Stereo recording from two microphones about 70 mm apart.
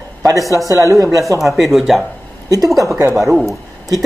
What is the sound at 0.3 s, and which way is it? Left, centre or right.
Speech, right.